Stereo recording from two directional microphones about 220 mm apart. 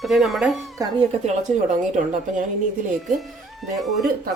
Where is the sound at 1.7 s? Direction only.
35° right (ahead or behind).